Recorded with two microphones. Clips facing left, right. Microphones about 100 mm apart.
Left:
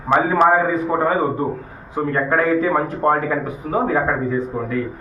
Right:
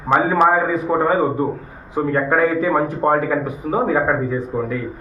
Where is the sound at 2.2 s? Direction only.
10° right (ahead or behind).